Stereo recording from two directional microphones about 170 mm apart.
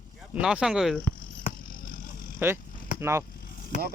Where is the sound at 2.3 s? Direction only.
15° right (ahead or behind).